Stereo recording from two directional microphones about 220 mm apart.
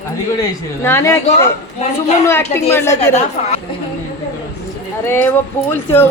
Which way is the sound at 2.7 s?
10° left (ahead or behind).